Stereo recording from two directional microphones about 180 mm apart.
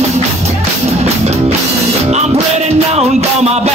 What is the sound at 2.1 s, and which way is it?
Music, 40° right (ahead or behind).